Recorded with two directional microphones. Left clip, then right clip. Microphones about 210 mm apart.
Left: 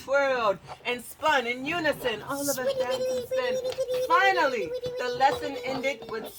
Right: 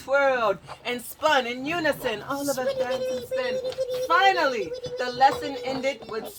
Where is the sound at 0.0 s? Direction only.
25° right (ahead or behind).